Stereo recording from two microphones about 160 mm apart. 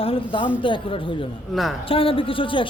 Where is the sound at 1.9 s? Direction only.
35° left (ahead or behind).